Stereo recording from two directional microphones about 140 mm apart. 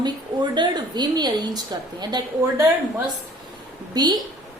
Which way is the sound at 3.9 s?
30° right (ahead or behind).